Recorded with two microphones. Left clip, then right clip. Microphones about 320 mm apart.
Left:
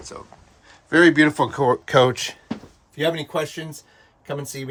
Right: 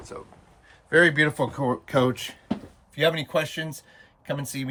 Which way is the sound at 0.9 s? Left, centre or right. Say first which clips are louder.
Left 4 dB; centre.